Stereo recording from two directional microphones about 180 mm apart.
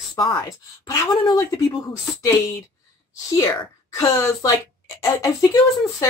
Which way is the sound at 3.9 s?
20° left (ahead or behind).